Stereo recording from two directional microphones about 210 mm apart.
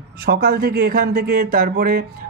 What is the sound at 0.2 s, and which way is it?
Speech, 45° right (ahead or behind).